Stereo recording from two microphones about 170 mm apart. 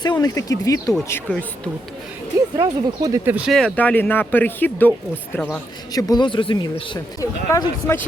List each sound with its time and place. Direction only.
0.0 s speech: 25° left (ahead or behind); by 1.7 s 5° left (ahead or behind)
2.6 s speech: 25° right (ahead or behind)
3.2 s speech: 10° right (ahead or behind)
3.5 s speech: 5° left (ahead or behind)
5.9 s speech: 20° left (ahead or behind)